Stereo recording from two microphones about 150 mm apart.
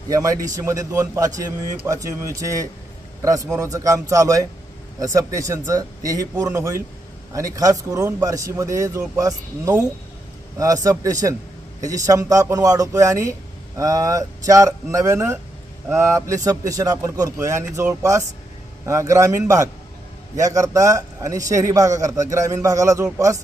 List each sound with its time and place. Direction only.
0.1 s a man's voice: 20° right (ahead or behind)